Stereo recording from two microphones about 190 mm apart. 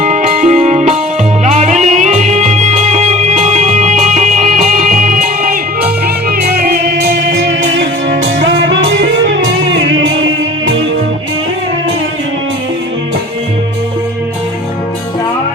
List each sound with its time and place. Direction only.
0.0 s music: 40° right (ahead or behind); by 10.1 s 85° right